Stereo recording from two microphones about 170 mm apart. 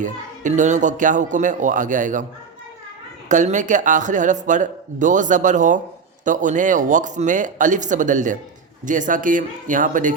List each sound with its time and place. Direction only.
0.0 s speech: 45° right (ahead or behind)
3.2 s speech: 45° right (ahead or behind)